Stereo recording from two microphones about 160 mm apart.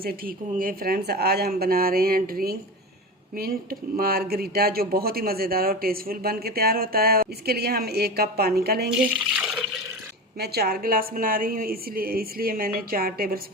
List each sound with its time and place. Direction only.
0.0 s speech: 65° right (ahead or behind)
9.3 s water: 5° right (ahead or behind)
10.3 s speech: 80° right